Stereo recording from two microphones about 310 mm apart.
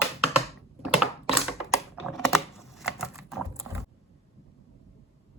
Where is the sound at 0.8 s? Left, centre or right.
Centre.